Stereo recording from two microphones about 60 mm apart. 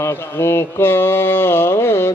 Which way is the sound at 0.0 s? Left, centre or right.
Left.